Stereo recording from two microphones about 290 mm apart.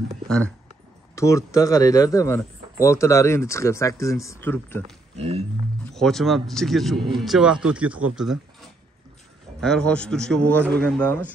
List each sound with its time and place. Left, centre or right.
1.1 s speech: centre
5.1 s wild animals: right
5.9 s speech: centre
9.6 s speech: centre